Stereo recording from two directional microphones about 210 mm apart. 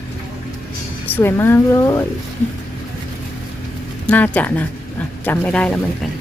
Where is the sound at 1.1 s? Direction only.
10° left (ahead or behind).